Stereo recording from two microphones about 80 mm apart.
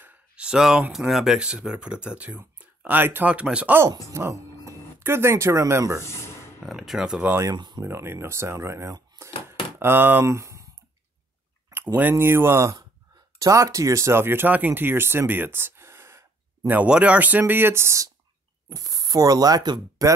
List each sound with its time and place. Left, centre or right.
0.0 s a sound: centre
0.5 s speech: centre
4.1 s speech: right
6.0 s speech: left
6.6 s speech: centre
7.5 s speech: right
7.8 s speech: right
9.8 s speech: right
11.7 s speech: right
16.6 s speech: centre; by 18.1 s right
18.7 s speech: right
20.0 s speech: right